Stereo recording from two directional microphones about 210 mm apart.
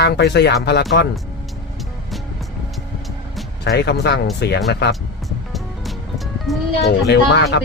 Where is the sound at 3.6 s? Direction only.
50° left (ahead or behind).